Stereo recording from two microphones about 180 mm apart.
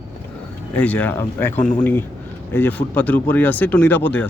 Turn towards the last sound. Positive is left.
turn(degrees=10)  # may be behind; listen again after turning